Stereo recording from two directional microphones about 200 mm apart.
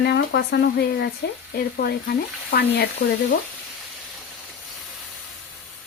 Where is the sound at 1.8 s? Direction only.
50° left (ahead or behind).